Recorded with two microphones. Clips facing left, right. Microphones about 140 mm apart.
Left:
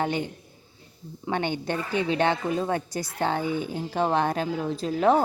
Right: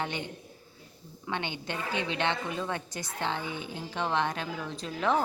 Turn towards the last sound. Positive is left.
turn(degrees=40)  # may be behind; listen again after turning